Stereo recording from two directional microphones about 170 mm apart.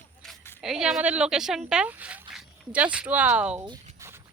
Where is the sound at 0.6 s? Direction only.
5° right (ahead or behind).